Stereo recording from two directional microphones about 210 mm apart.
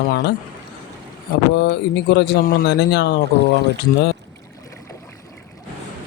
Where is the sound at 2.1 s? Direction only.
50° left (ahead or behind).